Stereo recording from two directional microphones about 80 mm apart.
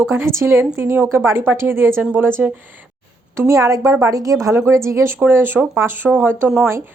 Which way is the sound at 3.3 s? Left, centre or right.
Right.